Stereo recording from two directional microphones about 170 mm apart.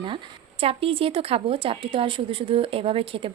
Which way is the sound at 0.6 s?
35° right (ahead or behind).